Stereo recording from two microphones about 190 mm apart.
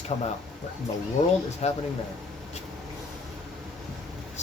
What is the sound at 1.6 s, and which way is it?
Speech, 35° left (ahead or behind).